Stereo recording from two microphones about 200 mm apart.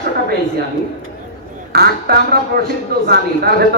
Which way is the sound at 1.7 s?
50° right (ahead or behind).